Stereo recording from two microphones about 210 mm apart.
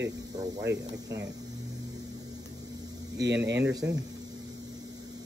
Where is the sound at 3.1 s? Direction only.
55° right (ahead or behind).